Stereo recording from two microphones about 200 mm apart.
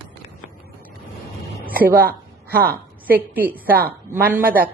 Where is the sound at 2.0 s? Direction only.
50° right (ahead or behind).